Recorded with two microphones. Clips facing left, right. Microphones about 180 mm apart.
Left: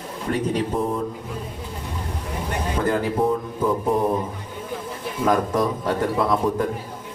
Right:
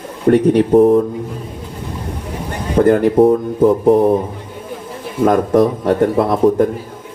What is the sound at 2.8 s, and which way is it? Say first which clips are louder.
Speech: right 12 dB; 65° right (ahead or behind).